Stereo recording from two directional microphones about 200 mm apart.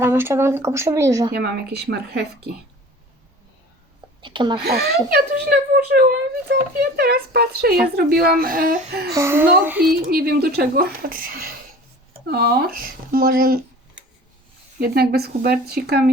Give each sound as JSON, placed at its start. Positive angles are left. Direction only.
{"t": 0.0, "sound": "speech", "side_deg": -10}
{"t": 1.3, "sound": "a child's voice", "side_deg": -55}
{"t": 4.2, "sound": "speech", "side_deg": -25}
{"t": 4.6, "sound": "a child's voice", "side_deg": -55}
{"t": 9.1, "sound": "speech", "side_deg": -10}
{"t": 10.1, "sound": "a child's voice", "side_deg": -50}
{"t": 14.8, "sound": "a child's voice", "side_deg": -55}